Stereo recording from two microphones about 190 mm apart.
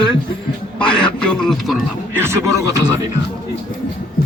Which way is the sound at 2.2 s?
15° right (ahead or behind).